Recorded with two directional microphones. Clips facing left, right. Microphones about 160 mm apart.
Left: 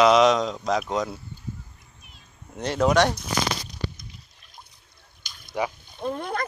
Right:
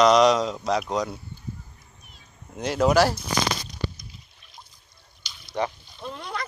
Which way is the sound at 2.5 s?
Centre (ahead or behind).